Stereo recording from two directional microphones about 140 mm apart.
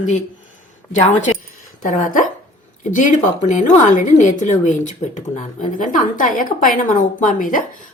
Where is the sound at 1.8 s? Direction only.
70° left (ahead or behind).